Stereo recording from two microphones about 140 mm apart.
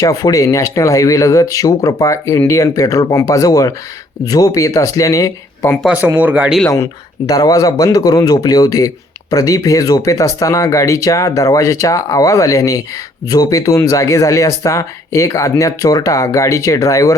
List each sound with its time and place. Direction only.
0.0 s speech: 25° left (ahead or behind)
5.8 s speech: 10° right (ahead or behind)
7.3 s speech: 25° left (ahead or behind)